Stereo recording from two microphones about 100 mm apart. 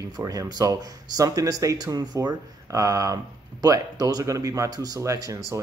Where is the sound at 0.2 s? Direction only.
35° right (ahead or behind).